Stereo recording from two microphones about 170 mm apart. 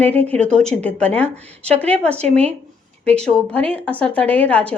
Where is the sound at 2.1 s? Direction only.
40° right (ahead or behind).